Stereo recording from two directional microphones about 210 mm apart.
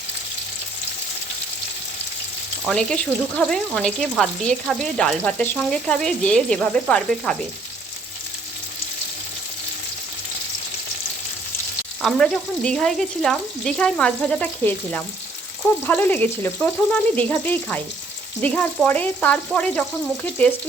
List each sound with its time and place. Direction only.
2.6 s frying: 5° left (ahead or behind)
12.0 s frying: 5° left (ahead or behind)
15.6 s speech: 10° left (ahead or behind)